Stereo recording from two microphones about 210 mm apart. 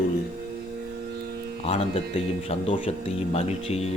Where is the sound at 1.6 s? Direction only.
30° left (ahead or behind).